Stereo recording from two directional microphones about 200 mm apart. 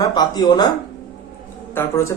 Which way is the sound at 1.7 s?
10° left (ahead or behind).